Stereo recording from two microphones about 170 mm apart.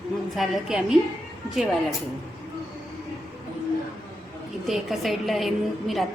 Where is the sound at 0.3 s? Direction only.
Centre (ahead or behind).